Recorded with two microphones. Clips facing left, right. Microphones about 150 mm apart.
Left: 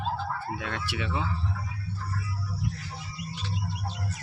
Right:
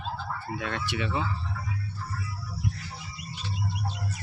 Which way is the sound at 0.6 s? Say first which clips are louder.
Right 2 dB; 5° left (ahead or behind).